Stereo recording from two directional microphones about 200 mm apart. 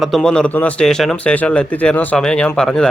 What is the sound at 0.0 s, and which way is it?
A man's voice, centre (ahead or behind).